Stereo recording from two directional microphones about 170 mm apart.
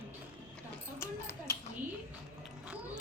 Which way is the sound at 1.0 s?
15° left (ahead or behind).